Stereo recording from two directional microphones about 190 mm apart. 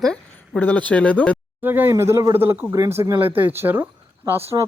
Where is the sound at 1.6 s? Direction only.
10° right (ahead or behind).